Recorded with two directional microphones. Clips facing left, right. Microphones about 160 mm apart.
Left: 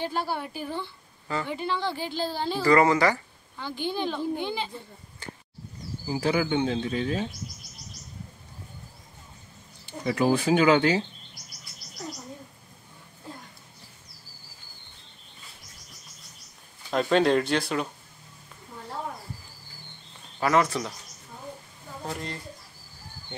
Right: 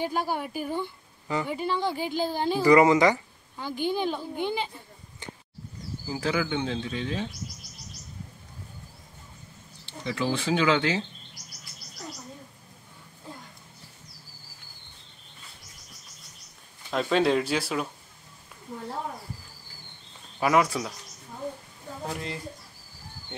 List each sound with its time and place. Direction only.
0.0 s a woman's voice: 10° right (ahead or behind)
5.2 s a sound: 20° right (ahead or behind)
6.0 s speech: 30° left (ahead or behind)
9.8 s speech: 50° left (ahead or behind)
16.9 s speech: centre (ahead or behind)
20.3 s a woman's voice: 10° right (ahead or behind)
22.0 s speech: centre (ahead or behind)